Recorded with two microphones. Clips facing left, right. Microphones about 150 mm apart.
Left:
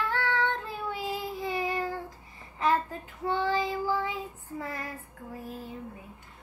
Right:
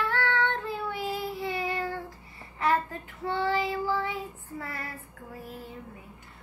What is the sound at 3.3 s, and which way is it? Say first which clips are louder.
Child singing: even; 15° left (ahead or behind).